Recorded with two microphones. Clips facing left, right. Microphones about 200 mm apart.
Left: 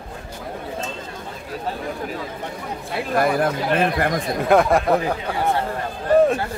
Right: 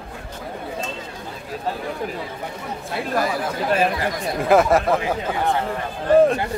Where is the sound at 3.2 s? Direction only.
55° left (ahead or behind).